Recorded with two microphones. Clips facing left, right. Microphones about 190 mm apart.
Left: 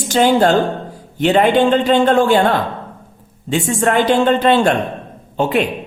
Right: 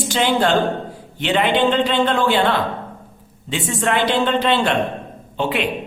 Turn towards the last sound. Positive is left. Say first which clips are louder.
# left 5 dB
turn(degrees=45)  # may be behind; listen again after turning